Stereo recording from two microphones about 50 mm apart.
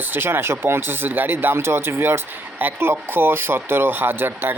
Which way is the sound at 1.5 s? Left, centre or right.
Right.